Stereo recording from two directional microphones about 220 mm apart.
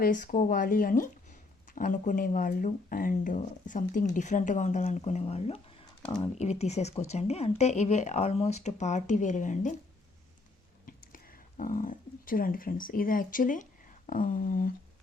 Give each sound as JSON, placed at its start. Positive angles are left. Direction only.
{"t": 0.0, "sound": "speech", "side_deg": 35}
{"t": 6.3, "sound": "speech", "side_deg": 30}
{"t": 10.8, "sound": "speech", "side_deg": 40}